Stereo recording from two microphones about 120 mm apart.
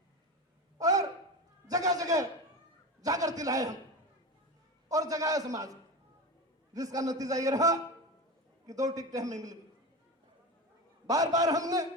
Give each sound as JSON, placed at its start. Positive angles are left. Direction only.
{"t": 0.8, "sound": "gasp", "side_deg": -30}
{"t": 1.7, "sound": "a sound", "side_deg": -30}
{"t": 4.9, "sound": "a man's voice", "side_deg": -30}
{"t": 6.7, "sound": "a man's voice", "side_deg": -30}
{"t": 11.1, "sound": "a man's voice", "side_deg": -30}